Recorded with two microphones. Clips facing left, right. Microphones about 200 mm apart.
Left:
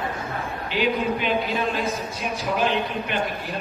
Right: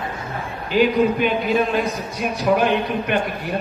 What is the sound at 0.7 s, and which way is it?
A man's voice, 45° right (ahead or behind).